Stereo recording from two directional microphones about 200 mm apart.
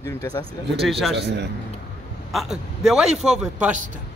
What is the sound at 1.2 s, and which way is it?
Speech, 60° right (ahead or behind).